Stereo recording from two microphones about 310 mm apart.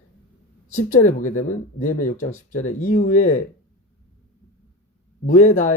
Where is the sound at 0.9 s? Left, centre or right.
Left.